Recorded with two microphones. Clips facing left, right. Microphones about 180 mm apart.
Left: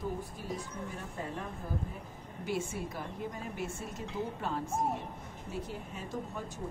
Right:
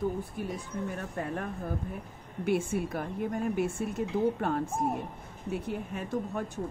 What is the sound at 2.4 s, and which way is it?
Speech, 60° right (ahead or behind).